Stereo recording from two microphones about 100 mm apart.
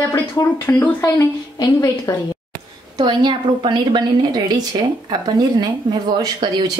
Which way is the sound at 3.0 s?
50° right (ahead or behind).